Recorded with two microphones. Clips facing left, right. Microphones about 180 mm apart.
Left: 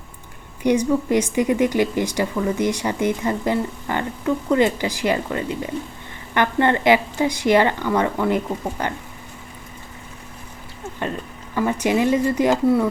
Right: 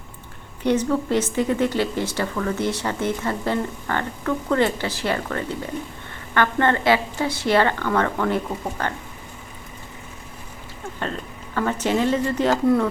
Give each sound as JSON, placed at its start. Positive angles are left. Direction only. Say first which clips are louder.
{"t": 0.6, "sound": "speech", "louder": "left 2 dB", "side_deg": 15}
{"t": 11.5, "sound": "speech", "louder": "left 2 dB", "side_deg": 10}